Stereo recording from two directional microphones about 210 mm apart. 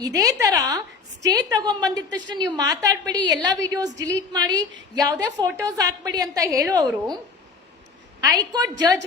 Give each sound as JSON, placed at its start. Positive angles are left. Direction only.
{"t": 0.0, "sound": "a woman's voice", "side_deg": -15}
{"t": 8.2, "sound": "a woman's voice", "side_deg": -20}